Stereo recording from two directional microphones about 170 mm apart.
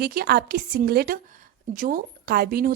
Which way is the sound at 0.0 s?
65° right (ahead or behind).